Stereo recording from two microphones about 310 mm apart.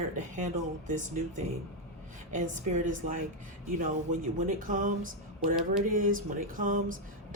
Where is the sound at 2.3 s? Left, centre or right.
Right.